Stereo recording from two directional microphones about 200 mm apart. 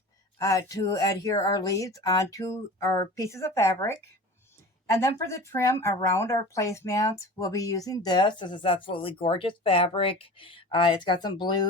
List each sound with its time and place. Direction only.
0.3 s speech: 15° left (ahead or behind)